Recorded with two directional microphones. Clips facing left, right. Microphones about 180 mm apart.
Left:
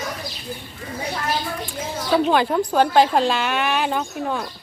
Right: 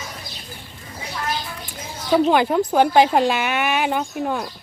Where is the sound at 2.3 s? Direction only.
10° right (ahead or behind).